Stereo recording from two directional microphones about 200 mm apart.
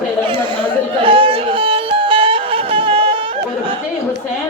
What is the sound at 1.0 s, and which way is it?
Music, 25° right (ahead or behind).